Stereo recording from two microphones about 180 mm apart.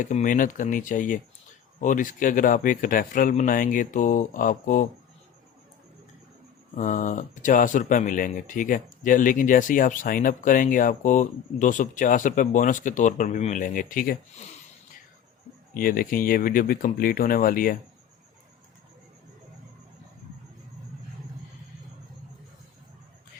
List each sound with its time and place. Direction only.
0.0 s speech: 45° left (ahead or behind)
6.7 s speech: 45° left (ahead or behind)
15.7 s speech: 50° left (ahead or behind)